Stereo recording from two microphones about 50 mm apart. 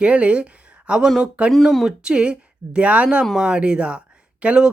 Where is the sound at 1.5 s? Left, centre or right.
Centre.